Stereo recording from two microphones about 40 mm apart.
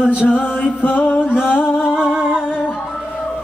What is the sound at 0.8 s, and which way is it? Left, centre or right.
Music, left.